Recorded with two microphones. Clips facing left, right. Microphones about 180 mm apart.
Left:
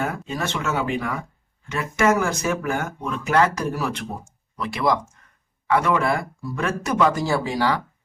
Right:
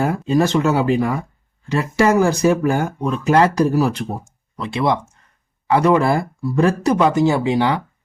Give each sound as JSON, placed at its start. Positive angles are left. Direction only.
{"t": 0.0, "sound": "speech", "side_deg": -35}